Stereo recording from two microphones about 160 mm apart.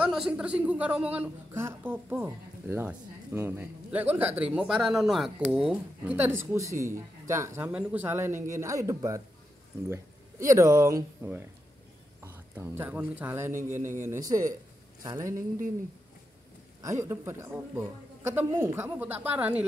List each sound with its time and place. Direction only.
0.0 s a woman's voice: 5° right (ahead or behind)
10.4 s a man's voice: 20° right (ahead or behind)
16.8 s a woman's voice: 20° right (ahead or behind)